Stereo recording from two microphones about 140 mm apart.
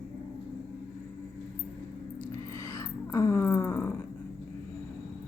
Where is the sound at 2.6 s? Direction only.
20° left (ahead or behind).